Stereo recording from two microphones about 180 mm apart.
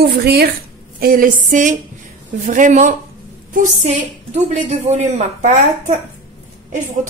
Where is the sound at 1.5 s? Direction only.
45° right (ahead or behind).